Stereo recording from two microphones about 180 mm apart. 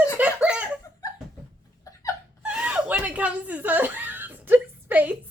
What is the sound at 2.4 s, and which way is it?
Snicker, 5° right (ahead or behind).